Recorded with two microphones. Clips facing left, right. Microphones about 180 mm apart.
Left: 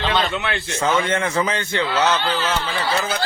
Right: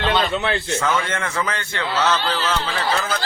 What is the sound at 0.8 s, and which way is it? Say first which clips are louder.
A man's voice: left 3 dB; 20° left (ahead or behind).